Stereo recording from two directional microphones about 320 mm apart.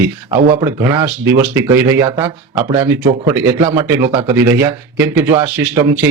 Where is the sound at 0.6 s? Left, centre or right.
Centre.